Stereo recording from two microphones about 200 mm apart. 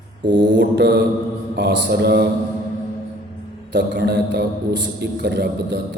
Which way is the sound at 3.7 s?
60° right (ahead or behind).